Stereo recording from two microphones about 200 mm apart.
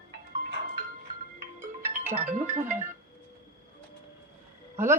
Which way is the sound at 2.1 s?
35° right (ahead or behind).